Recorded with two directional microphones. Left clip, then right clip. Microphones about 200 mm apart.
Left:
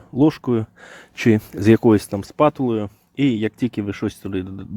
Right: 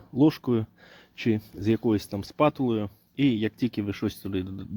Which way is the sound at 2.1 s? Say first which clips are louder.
Left 7 dB; 15° left (ahead or behind).